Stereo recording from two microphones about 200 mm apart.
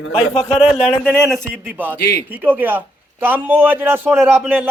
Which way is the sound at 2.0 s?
55° left (ahead or behind).